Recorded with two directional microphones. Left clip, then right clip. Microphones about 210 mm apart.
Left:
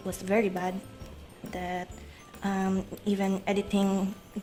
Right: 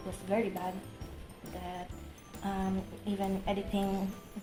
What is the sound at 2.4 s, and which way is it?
A woman's voice, 50° left (ahead or behind).